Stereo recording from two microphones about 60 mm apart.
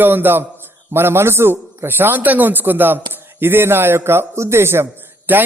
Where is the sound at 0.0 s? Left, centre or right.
Right.